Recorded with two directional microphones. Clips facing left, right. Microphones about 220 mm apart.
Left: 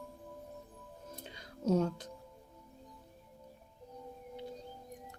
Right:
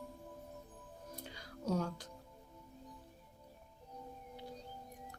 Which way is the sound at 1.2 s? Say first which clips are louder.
Left 7 dB; 20° left (ahead or behind).